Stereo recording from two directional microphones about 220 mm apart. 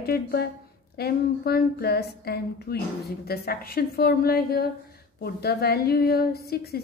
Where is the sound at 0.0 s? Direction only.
45° left (ahead or behind).